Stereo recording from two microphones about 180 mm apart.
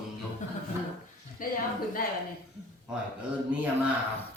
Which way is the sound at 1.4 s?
50° left (ahead or behind).